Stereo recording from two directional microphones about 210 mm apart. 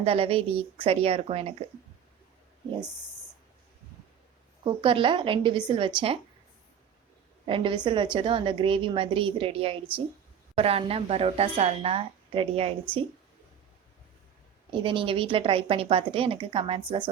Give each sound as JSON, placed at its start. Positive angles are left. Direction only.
{"t": 0.0, "sound": "a woman's voice", "side_deg": -25}
{"t": 4.6, "sound": "a woman's voice", "side_deg": -25}
{"t": 7.4, "sound": "a woman's voice", "side_deg": -25}
{"t": 14.7, "sound": "a woman's voice", "side_deg": -25}